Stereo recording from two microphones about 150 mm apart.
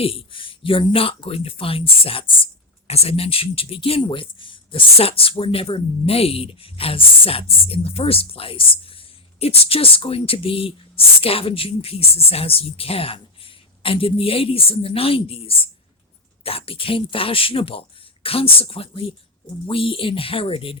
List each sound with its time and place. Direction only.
0.0 s speech: 40° left (ahead or behind)